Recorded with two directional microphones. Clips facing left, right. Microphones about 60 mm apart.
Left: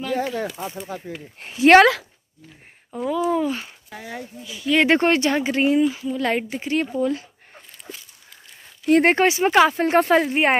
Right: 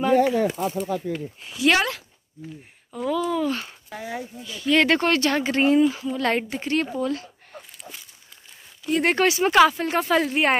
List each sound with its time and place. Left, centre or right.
0.0 s speech: right
1.5 s speech: left
3.0 s speech: centre
3.9 s a woman's voice: centre
4.5 s speech: centre
4.8 s speech: left
5.6 s a woman's voice: centre
9.0 s speech: left
9.8 s speech: left
10.1 s speech: left